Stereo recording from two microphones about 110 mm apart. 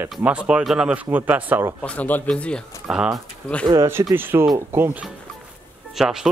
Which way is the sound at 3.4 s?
5° left (ahead or behind).